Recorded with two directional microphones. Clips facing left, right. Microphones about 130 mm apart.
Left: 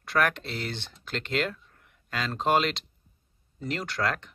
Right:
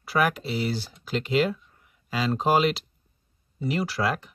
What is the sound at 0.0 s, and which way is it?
Speech, 5° right (ahead or behind).